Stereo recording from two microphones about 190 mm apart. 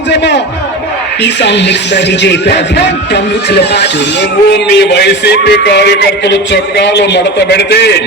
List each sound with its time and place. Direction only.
0.1 s a man's voice: 65° left (ahead or behind)